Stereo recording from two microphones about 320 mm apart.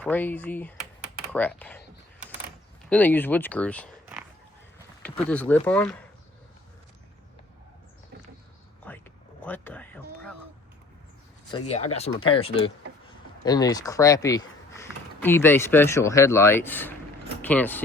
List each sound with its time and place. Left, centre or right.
0.0 s speech: centre
2.9 s speech: centre
8.9 s a sound: centre
9.4 s music: centre
11.9 s speech: centre